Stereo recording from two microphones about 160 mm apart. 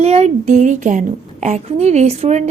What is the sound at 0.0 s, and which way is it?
A woman's voice, 40° right (ahead or behind).